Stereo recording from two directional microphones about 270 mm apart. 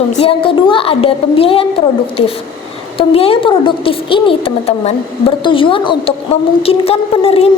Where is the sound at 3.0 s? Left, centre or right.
Left.